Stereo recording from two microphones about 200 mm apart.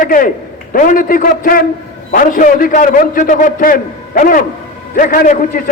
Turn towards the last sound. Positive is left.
turn(degrees=40)  # may be behind; listen again after turning